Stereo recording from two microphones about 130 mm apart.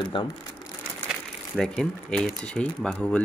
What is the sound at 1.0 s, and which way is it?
Speech, centre (ahead or behind).